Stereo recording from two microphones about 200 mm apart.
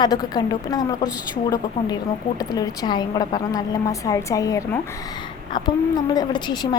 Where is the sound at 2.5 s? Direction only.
20° left (ahead or behind).